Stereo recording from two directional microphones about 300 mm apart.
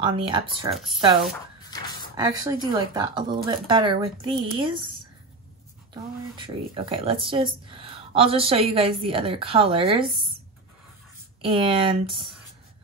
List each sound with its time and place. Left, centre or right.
0.0 s speech: centre
0.7 s speech: centre
2.1 s speech: centre
6.3 s speech: centre
11.4 s speech: centre